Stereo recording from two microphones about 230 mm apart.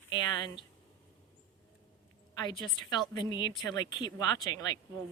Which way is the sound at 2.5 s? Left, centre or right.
Centre.